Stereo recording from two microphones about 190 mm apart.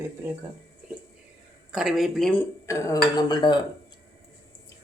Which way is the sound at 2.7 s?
15° left (ahead or behind).